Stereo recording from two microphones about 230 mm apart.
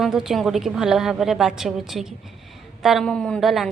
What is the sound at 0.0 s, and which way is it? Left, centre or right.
A woman's voice, centre.